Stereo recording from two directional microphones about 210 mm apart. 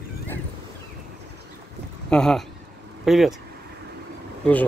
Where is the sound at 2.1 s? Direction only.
5° left (ahead or behind).